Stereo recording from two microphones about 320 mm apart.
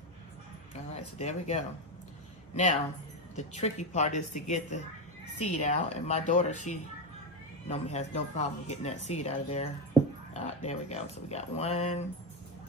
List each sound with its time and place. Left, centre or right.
0.9 s speech: centre